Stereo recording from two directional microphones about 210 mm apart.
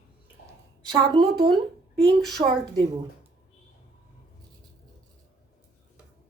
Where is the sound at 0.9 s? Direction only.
20° right (ahead or behind).